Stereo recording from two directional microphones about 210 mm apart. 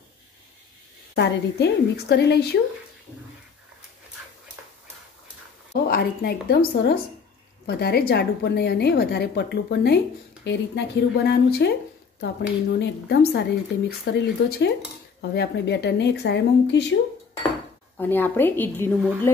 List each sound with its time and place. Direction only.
1.1 s a woman's voice: 50° left (ahead or behind)
5.7 s a woman's voice: 45° left (ahead or behind)
17.9 s a woman's voice: 10° left (ahead or behind)